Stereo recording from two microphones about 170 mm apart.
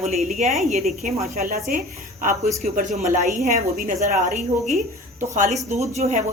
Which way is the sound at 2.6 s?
50° right (ahead or behind).